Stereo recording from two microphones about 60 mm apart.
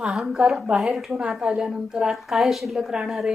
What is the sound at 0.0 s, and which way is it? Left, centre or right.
A woman's voice, centre.